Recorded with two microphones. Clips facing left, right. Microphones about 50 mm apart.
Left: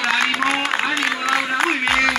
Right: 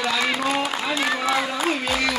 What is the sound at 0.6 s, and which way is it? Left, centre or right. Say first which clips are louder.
Applause: left 4 dB; left.